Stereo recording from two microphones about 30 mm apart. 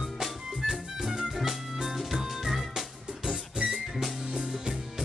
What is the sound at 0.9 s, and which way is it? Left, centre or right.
Music, right.